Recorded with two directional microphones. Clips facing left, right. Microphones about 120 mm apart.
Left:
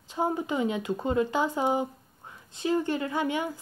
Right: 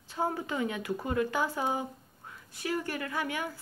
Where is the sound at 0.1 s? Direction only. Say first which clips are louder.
Left 4 dB; 20° left (ahead or behind).